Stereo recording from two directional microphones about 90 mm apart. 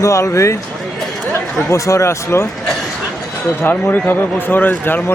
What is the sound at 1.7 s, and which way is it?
Speech, 30° left (ahead or behind).